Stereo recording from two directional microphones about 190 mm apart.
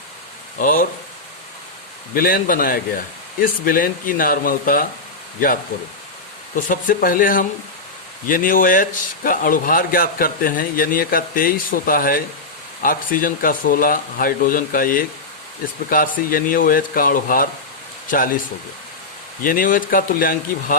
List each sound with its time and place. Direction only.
0.6 s speech: 45° left (ahead or behind)
2.1 s speech: 50° left (ahead or behind)
6.6 s speech: 45° left (ahead or behind)
19.4 s speech: 45° left (ahead or behind)